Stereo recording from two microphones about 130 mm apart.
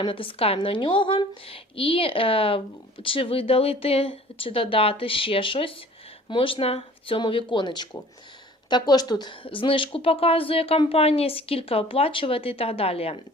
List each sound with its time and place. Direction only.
0.0 s speech: 40° left (ahead or behind)